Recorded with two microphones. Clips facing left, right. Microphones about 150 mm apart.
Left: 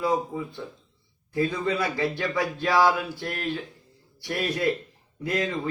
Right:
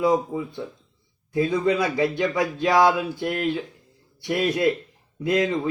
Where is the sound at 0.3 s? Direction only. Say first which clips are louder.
Right 4 dB; 5° right (ahead or behind).